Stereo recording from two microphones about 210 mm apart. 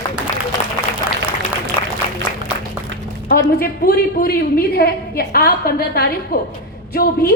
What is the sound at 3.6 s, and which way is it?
A woman's voice, 45° left (ahead or behind).